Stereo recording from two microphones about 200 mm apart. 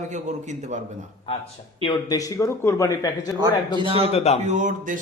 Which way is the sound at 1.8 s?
20° left (ahead or behind).